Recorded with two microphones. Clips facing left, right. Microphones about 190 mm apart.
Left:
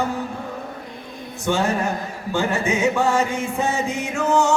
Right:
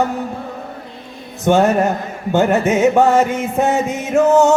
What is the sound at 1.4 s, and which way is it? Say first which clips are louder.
Music: right 8 dB; 65° right (ahead or behind).